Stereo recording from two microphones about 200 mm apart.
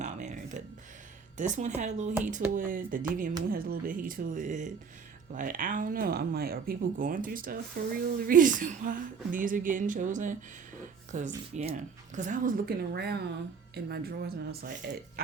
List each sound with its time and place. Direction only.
0.0 s music: 35° right (ahead or behind)
1.4 s speech: 40° right (ahead or behind)